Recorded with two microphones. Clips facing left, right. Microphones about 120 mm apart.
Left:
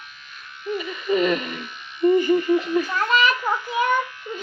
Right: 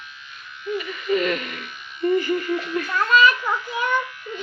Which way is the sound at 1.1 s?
25° left (ahead or behind).